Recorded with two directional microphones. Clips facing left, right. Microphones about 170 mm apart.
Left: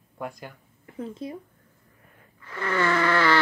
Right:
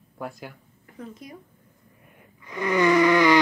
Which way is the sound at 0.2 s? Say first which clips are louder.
Even; 5° right (ahead or behind).